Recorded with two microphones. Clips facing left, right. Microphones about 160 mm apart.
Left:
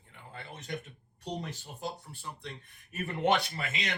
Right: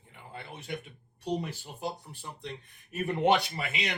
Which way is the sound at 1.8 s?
15° right (ahead or behind).